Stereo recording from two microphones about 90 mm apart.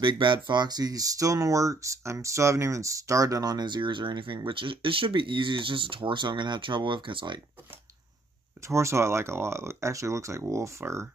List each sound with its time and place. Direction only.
0.0 s speech: 65° right (ahead or behind)
0.5 s speech: 50° right (ahead or behind)
8.6 s speech: 30° right (ahead or behind)